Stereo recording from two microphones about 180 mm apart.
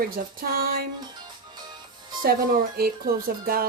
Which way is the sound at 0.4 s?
55° right (ahead or behind).